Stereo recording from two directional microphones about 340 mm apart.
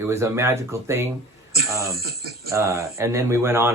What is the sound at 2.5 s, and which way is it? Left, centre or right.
Speech, centre.